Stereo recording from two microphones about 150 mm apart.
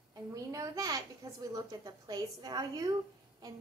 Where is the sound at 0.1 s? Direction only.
25° right (ahead or behind).